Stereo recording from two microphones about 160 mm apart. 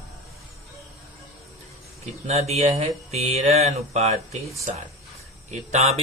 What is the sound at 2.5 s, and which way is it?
Speech, 40° right (ahead or behind).